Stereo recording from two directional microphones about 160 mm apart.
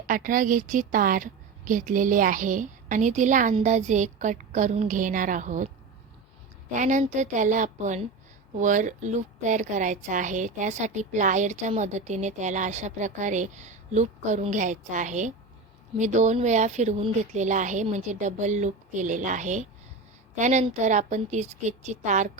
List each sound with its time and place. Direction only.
0.1 s a woman's voice: 55° right (ahead or behind)
6.7 s a woman's voice: 50° right (ahead or behind)